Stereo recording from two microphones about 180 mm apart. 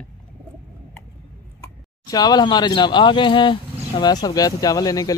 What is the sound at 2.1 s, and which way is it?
Speech, 20° left (ahead or behind).